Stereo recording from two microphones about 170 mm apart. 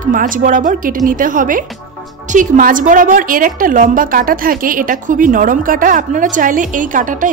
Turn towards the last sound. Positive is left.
turn(degrees=-50)  # may be behind; listen again after turning